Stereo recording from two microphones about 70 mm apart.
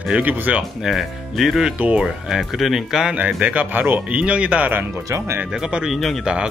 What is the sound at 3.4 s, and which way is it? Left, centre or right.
Speech, right.